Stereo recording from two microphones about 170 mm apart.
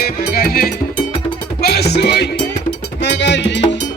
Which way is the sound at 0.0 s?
60° left (ahead or behind).